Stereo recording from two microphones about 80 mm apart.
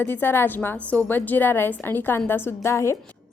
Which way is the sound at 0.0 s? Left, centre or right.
Left.